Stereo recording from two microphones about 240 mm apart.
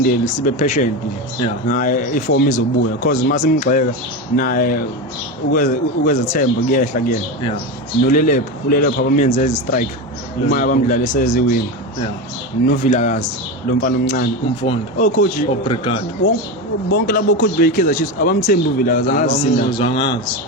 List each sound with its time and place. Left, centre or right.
0.0 s speech: left
12.6 s speech: left
15.6 s a man's voice: left
16.9 s speech: left
19.4 s a man's voice: left